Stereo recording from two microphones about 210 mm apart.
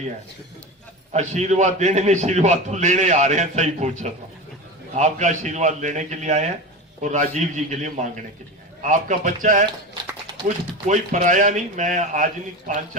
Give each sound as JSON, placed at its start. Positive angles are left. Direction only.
{"t": 1.1, "sound": "a man's voice", "side_deg": -35}